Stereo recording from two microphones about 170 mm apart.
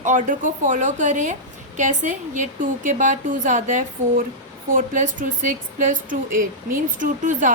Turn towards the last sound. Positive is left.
turn(degrees=-50)  # may be behind; listen again after turning